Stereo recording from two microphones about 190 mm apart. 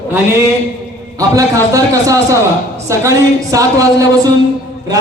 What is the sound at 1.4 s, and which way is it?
A man's voice, 20° right (ahead or behind).